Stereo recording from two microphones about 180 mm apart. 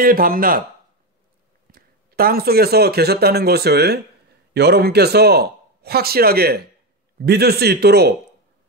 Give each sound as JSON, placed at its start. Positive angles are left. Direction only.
{"t": 0.0, "sound": "speech", "side_deg": -50}
{"t": 1.7, "sound": "a man's voice", "side_deg": -55}